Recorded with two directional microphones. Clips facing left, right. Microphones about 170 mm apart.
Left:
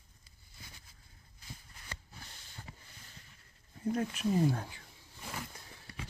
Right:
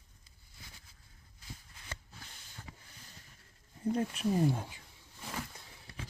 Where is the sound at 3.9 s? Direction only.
30° right (ahead or behind).